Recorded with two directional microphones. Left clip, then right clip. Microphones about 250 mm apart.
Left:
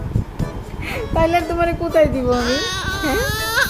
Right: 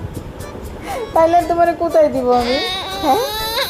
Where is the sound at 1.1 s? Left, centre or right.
Centre.